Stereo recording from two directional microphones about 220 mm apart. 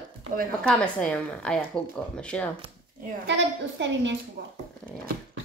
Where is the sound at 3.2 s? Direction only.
55° right (ahead or behind).